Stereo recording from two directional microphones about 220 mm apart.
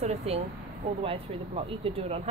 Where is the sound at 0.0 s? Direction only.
30° right (ahead or behind).